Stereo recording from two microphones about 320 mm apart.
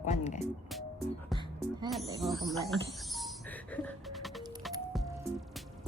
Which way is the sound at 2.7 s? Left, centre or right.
Centre.